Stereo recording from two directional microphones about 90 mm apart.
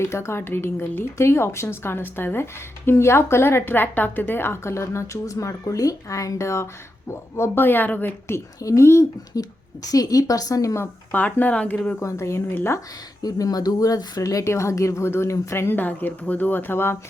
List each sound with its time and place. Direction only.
0.0 s speech: 30° left (ahead or behind)
8.6 s speech: 35° left (ahead or behind)
11.1 s speech: 20° left (ahead or behind)
11.9 s speech: 35° left (ahead or behind)
13.2 s speech: 45° left (ahead or behind); by 17.0 s 25° left (ahead or behind)